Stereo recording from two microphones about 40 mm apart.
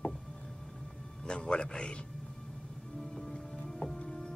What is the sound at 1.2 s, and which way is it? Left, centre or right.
Music, left.